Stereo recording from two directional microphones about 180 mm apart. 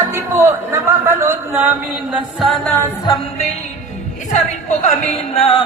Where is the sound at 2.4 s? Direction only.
Centre (ahead or behind).